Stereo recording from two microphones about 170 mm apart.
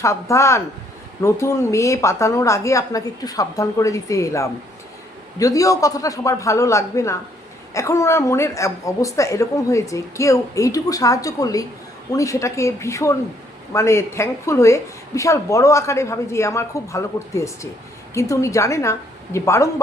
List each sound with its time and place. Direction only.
0.0 s a woman's voice: 15° left (ahead or behind)